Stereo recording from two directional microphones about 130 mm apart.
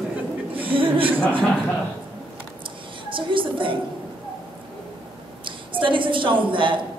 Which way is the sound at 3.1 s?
40° right (ahead or behind).